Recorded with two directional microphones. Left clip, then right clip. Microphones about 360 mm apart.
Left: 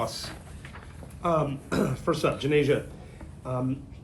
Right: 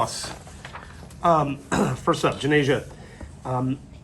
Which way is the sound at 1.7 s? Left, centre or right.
Right.